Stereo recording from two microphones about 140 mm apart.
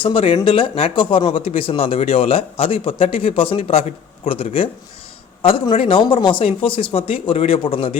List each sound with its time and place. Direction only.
0.0 s speech: 40° left (ahead or behind)